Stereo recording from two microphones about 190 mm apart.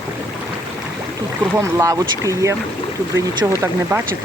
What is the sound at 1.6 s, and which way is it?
Speech, 15° right (ahead or behind).